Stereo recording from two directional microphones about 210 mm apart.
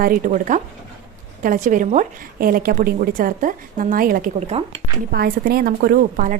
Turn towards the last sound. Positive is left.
turn(degrees=-40)  # may be behind; listen again after turning